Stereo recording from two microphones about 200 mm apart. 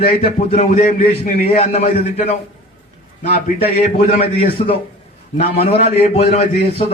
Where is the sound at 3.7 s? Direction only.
30° left (ahead or behind).